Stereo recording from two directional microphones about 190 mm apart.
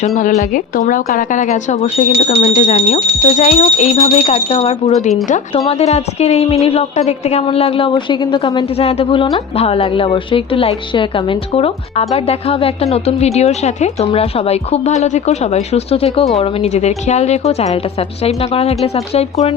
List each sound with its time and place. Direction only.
0.2 s a woman's voice: 40° left (ahead or behind)